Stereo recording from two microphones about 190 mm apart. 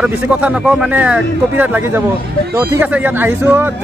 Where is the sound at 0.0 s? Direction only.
5° right (ahead or behind).